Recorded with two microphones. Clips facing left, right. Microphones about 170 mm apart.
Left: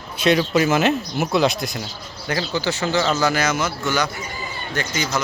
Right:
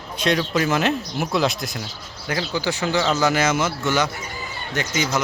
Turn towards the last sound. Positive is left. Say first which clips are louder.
# right 1 dB
turn(degrees=-20)  # may be behind; listen again after turning